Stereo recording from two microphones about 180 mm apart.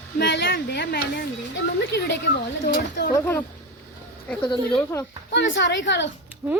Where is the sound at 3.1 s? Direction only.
10° left (ahead or behind).